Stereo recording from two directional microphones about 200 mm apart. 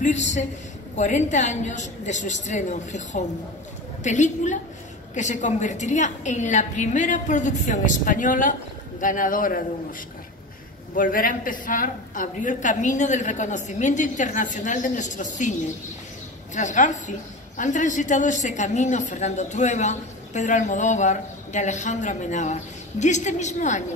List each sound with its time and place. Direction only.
0.0 s a man's voice: 35° left (ahead or behind)
11.0 s speech: 45° left (ahead or behind)
16.5 s speech: 40° left (ahead or behind)